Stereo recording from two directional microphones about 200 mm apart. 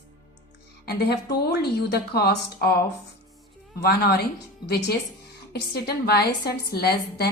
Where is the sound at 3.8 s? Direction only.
50° left (ahead or behind).